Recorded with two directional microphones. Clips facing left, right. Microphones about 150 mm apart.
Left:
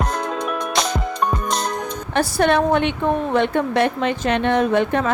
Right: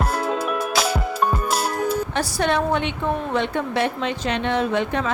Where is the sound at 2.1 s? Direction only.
60° left (ahead or behind).